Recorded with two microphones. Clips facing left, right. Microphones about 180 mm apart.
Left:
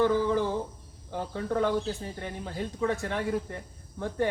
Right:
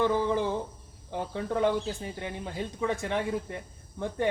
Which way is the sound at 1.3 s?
20° right (ahead or behind).